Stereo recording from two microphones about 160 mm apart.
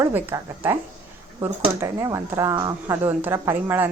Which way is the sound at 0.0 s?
15° right (ahead or behind).